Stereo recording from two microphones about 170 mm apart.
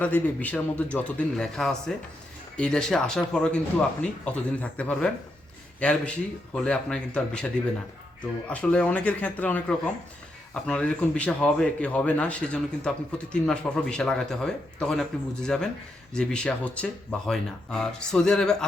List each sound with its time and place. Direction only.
0.0 s speech: 10° left (ahead or behind)